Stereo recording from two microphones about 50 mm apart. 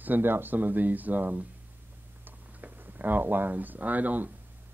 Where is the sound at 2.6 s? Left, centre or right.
Right.